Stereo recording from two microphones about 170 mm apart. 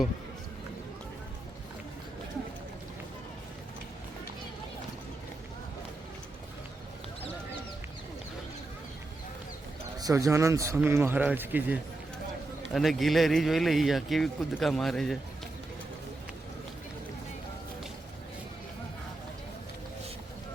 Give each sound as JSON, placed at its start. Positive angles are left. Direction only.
{"t": 10.0, "sound": "speech", "side_deg": -20}